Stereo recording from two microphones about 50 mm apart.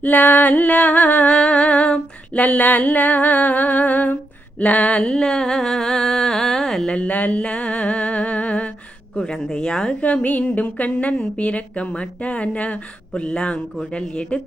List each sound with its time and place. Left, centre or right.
0.0 s music: left; by 6.9 s centre
6.9 s music: left
9.1 s speech: centre
10.2 s music: left